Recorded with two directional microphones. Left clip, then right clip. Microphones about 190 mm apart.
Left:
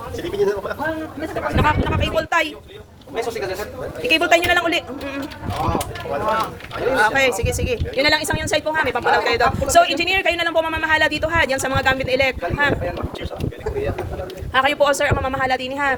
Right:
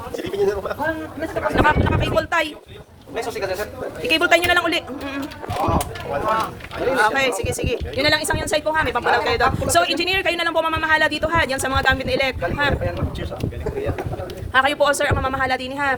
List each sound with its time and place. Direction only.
0.3 s speech: 25° right (ahead or behind)
1.5 s speech: 10° right (ahead or behind)
4.0 s speech: 15° right (ahead or behind)
6.9 s speech: centre (ahead or behind)
14.5 s speech: 10° right (ahead or behind)